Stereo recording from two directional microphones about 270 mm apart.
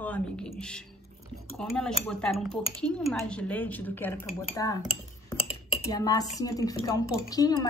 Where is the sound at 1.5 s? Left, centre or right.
Centre.